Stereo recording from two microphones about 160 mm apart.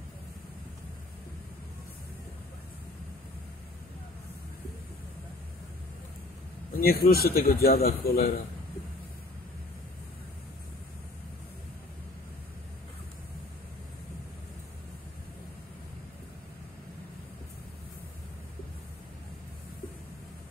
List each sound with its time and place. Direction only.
6.7 s a man's voice: 70° left (ahead or behind)